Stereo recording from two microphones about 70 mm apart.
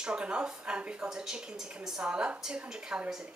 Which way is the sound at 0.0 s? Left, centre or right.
Centre.